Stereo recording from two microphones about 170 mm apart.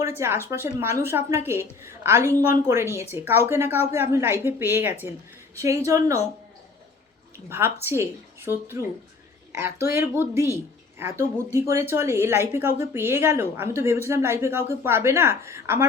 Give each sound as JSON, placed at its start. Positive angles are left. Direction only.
{"t": 0.0, "sound": "speech", "side_deg": -15}
{"t": 7.5, "sound": "speech", "side_deg": -15}